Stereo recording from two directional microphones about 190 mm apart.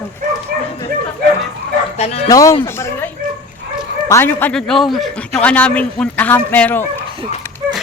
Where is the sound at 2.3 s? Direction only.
20° left (ahead or behind).